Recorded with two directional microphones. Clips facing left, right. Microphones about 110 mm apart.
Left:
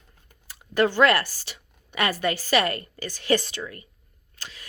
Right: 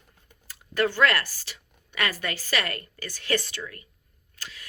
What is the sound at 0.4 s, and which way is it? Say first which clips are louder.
Speech: left 3 dB; 15° left (ahead or behind).